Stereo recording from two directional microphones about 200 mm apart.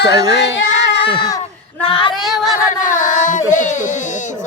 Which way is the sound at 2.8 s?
40° left (ahead or behind).